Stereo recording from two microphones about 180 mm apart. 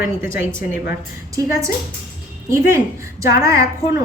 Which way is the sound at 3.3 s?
20° right (ahead or behind).